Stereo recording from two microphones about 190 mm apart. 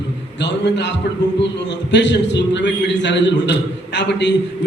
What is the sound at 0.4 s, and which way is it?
A man's voice, 65° left (ahead or behind).